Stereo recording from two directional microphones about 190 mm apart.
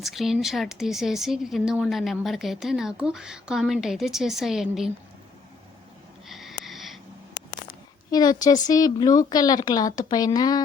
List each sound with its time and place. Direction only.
0.0 s speech: centre (ahead or behind)
6.2 s sniff: centre (ahead or behind)
8.1 s a woman's voice: 20° left (ahead or behind)